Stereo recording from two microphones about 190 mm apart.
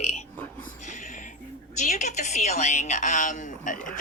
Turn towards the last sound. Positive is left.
turn(degrees=45)  # may be behind; listen again after turning